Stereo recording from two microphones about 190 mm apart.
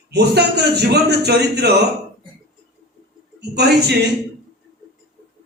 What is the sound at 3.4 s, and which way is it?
Speech, 60° right (ahead or behind).